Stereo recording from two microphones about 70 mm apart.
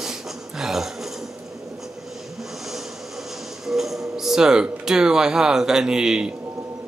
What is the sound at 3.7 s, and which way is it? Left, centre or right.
Speech, centre.